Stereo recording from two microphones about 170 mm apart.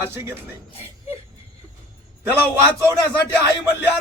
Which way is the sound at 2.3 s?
15° right (ahead or behind).